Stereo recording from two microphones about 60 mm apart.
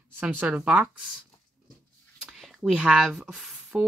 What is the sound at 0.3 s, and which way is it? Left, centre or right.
Speech, right.